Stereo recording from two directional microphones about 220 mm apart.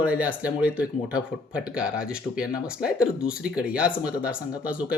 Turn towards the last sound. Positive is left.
turn(degrees=-5)  # may be behind; listen again after turning